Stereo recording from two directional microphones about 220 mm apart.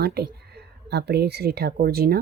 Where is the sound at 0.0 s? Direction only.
45° right (ahead or behind).